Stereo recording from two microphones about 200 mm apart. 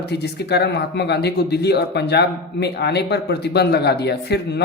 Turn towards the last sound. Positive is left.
turn(degrees=55)  # may be behind; listen again after turning